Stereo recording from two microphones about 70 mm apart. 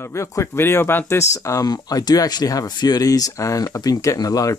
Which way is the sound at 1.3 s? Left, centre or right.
Left.